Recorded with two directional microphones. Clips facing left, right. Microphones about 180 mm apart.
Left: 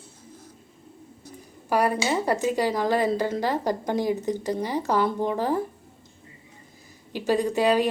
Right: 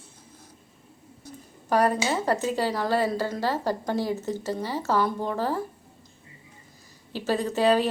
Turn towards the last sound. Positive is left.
turn(degrees=15)  # may be behind; listen again after turning